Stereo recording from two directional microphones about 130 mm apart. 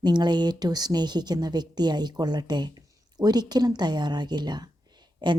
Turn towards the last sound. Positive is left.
turn(degrees=-35)  # may be behind; listen again after turning